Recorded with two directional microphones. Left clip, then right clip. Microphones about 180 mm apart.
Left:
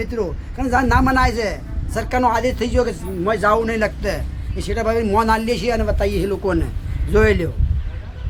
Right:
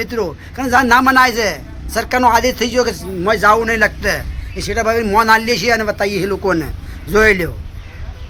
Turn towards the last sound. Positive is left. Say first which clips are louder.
# right 5 dB
turn(degrees=-15)  # may be behind; listen again after turning